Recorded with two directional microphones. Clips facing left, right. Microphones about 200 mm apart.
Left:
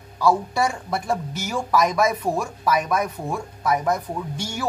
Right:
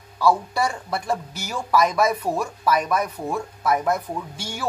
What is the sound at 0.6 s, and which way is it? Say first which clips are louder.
A woman's voice: left 1 dB; centre (ahead or behind).